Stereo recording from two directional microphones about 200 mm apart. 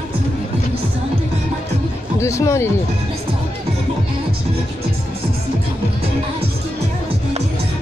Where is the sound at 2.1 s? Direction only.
15° left (ahead or behind).